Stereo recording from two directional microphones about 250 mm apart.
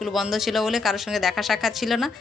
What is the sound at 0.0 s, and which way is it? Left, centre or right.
Speech, centre.